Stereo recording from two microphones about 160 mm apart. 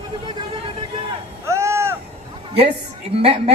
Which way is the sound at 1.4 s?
15° right (ahead or behind).